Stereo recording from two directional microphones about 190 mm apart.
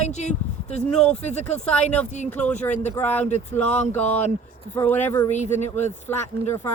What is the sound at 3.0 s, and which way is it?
Speech, 10° left (ahead or behind).